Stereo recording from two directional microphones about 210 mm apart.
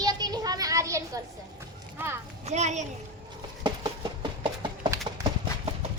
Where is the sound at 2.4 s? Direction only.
35° right (ahead or behind).